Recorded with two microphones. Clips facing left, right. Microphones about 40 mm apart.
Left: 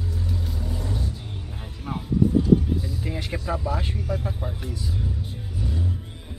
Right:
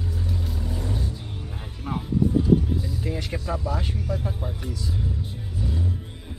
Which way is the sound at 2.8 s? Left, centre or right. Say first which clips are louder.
Right 1 dB; centre.